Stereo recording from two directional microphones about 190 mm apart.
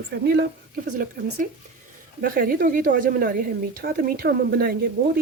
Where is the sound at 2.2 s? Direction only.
50° right (ahead or behind).